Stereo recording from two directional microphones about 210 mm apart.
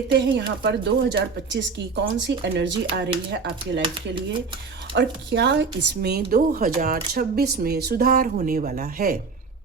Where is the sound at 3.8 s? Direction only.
25° right (ahead or behind).